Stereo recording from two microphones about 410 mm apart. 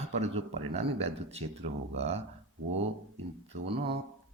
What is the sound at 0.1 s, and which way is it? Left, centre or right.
Speech, centre.